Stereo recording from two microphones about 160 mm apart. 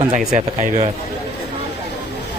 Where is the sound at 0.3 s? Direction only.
50° right (ahead or behind).